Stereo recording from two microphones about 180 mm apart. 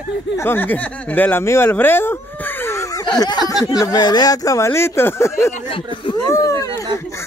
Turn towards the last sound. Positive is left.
turn(degrees=15)  # may be behind; listen again after turning